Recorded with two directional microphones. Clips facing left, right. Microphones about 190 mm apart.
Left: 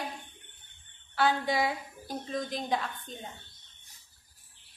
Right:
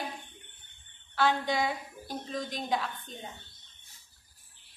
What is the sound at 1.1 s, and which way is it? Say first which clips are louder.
A woman's voice: even; 5° left (ahead or behind).